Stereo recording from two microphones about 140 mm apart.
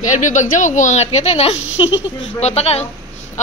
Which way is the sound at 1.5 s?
10° right (ahead or behind).